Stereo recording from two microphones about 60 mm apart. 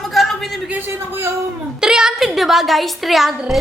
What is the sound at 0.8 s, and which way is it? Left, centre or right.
Speech, right.